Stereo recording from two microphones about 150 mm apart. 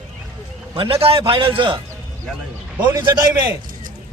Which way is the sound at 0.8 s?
40° right (ahead or behind).